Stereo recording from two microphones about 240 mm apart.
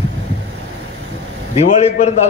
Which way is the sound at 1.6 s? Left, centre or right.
Left.